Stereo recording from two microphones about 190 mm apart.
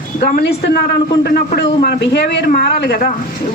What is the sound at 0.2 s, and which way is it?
A man's voice, 50° left (ahead or behind).